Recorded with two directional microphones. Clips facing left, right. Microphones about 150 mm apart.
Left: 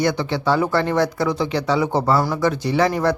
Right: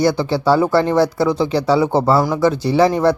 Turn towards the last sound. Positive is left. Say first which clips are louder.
# right 5 dB
turn(degrees=-30)  # may be behind; listen again after turning